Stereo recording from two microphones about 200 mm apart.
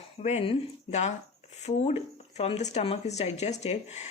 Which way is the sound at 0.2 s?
35° left (ahead or behind).